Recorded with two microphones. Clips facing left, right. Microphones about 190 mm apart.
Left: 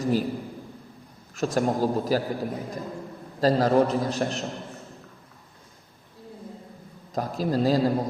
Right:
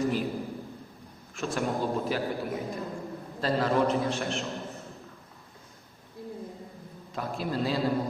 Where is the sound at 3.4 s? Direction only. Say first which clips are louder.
Left 5 dB; 40° left (ahead or behind).